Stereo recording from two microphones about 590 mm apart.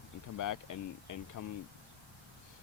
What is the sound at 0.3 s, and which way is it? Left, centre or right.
Speech, left.